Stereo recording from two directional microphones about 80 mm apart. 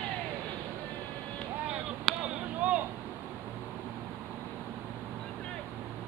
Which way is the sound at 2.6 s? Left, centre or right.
Centre.